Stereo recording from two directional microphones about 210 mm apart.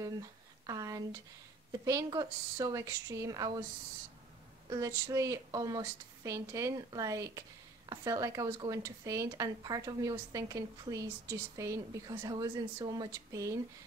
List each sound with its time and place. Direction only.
0.7 s speech: 15° right (ahead or behind)
4.6 s speech: 15° right (ahead or behind)